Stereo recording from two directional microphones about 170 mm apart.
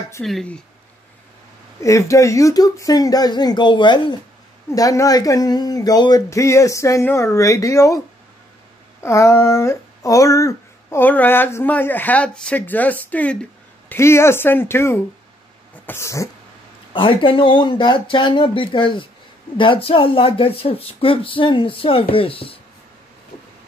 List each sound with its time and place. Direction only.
0.2 s speech: 5° left (ahead or behind)
1.8 s speech: 15° left (ahead or behind)
9.0 s speech: 15° left (ahead or behind)
16.9 s speech: 30° left (ahead or behind)